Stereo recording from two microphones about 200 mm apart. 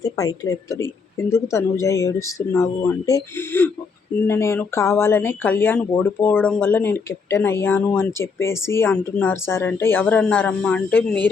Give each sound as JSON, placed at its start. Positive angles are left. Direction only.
{"t": 0.0, "sound": "speech", "side_deg": 15}